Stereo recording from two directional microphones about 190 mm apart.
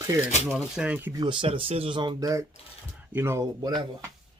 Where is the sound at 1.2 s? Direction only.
25° right (ahead or behind).